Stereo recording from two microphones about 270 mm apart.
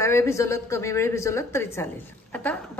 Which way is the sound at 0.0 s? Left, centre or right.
Centre.